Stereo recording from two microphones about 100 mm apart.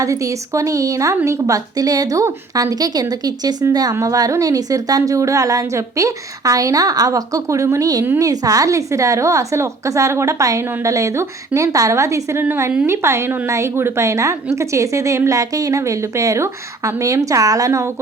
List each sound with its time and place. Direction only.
0.0 s a woman's voice: 35° right (ahead or behind)